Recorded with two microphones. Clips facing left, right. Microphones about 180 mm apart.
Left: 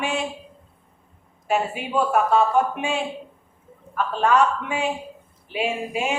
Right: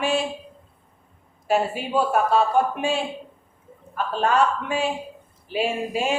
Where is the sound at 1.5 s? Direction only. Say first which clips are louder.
Right 2 dB; 35° right (ahead or behind).